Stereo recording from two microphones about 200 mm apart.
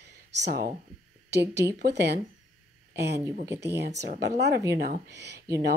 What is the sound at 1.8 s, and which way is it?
Speech, 55° right (ahead or behind).